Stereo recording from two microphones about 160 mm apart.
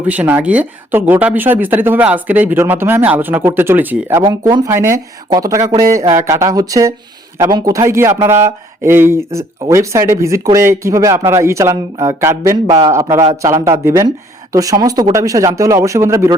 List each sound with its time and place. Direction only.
0.0 s speech: 10° right (ahead or behind)
4.2 s speech: 25° right (ahead or behind)